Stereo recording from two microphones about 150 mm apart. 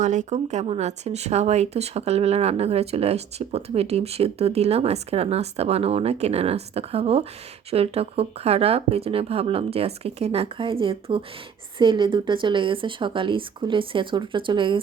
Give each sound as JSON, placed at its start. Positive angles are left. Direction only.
{"t": 0.0, "sound": "speech", "side_deg": -55}